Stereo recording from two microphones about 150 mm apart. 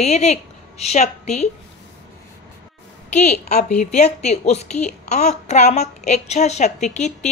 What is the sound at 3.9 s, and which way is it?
A woman's voice, 50° left (ahead or behind).